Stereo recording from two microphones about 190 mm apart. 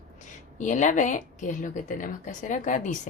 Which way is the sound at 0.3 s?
40° left (ahead or behind).